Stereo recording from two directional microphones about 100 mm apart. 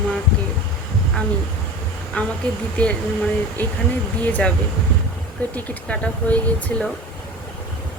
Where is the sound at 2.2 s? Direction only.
15° left (ahead or behind).